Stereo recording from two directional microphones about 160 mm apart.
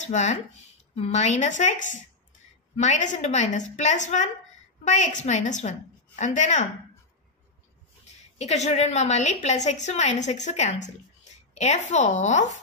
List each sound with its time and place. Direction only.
0.0 s a woman's voice: 50° left (ahead or behind)
8.4 s a woman's voice: 45° left (ahead or behind)